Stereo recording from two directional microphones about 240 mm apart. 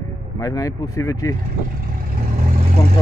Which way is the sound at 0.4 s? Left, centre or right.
Centre.